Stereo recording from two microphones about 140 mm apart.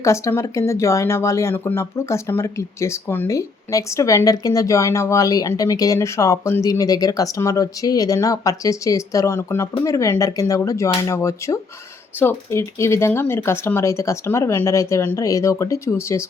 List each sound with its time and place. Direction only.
0.0 s speech: 20° left (ahead or behind)